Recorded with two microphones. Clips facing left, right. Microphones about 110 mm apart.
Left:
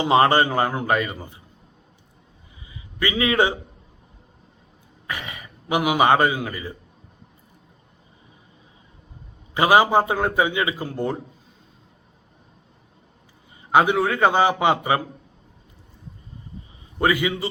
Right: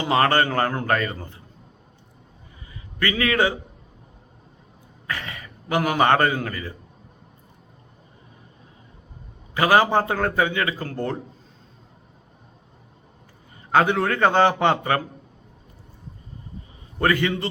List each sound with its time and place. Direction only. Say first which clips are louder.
0.0 s a man's voice: left 3 dB; 20° left (ahead or behind)
3.0 s a man's voice: left 1 dB; 20° left (ahead or behind)
5.0 s a man's voice: even; 15° left (ahead or behind)
9.6 s a man's voice: left 2 dB; 15° left (ahead or behind)
13.7 s a man's voice: left 1 dB; 10° left (ahead or behind)
17.0 s a man's voice: even; 10° left (ahead or behind)